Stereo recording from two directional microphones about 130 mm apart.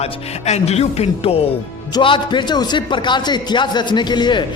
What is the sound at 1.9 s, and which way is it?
Speech, 40° left (ahead or behind).